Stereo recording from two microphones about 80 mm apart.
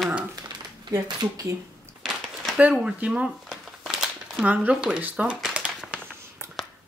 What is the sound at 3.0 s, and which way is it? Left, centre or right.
Speech, centre.